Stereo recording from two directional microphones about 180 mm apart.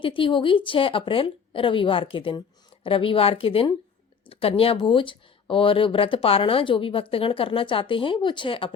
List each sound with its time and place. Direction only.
0.0 s speech: 30° left (ahead or behind)